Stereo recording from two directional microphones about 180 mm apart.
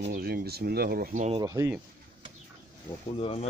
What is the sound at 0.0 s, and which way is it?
Speech, 60° right (ahead or behind).